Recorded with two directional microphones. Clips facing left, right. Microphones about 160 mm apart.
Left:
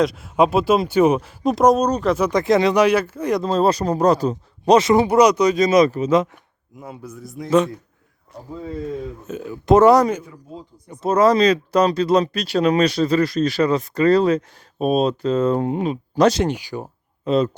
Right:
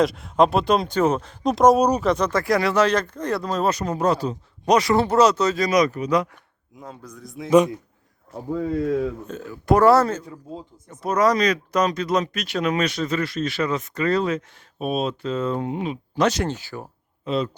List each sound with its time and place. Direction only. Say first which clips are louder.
0.0 s speech: left 1 dB; centre (ahead or behind)
2.0 s speech: left 2 dB; 5° left (ahead or behind)
2.3 s speech: left 4 dB; 20° left (ahead or behind)
3.4 s speech: left 6 dB; 30° left (ahead or behind)
4.7 s speech: left 4 dB; 20° left (ahead or behind)
6.7 s speech: left 4 dB; 5° left (ahead or behind)
8.5 s speech: right 5 dB; 80° right
9.2 s speech: left 2 dB; 15° left (ahead or behind)
11.0 s speech: left 4 dB; 25° left (ahead or behind)
16.4 s speech: left 5 dB; 15° left (ahead or behind)
17.2 s a man's voice: left 6 dB; 45° left (ahead or behind)